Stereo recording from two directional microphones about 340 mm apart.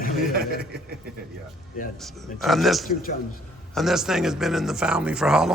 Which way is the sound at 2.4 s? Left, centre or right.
Centre.